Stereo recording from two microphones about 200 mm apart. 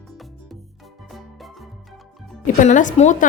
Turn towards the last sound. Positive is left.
turn(degrees=35)  # may be behind; listen again after turning